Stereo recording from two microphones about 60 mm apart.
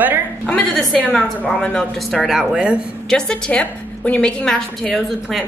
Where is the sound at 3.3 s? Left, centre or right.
Left.